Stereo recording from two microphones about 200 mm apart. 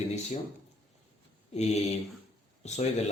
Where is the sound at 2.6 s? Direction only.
35° left (ahead or behind).